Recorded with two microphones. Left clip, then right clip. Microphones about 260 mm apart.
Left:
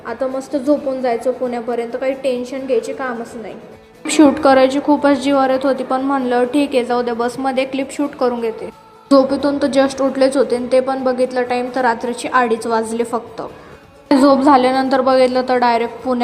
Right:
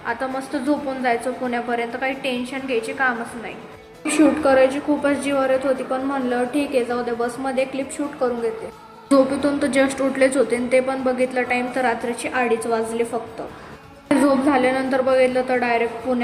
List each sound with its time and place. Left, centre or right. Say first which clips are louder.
0.0 s speech: left 3 dB; centre
4.1 s a woman's voice: left 5 dB; left
9.0 s a woman's voice: left 4 dB; centre
14.4 s a woman's voice: left 7 dB; left